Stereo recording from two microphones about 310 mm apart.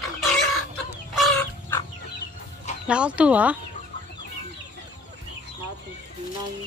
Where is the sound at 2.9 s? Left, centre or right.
Centre.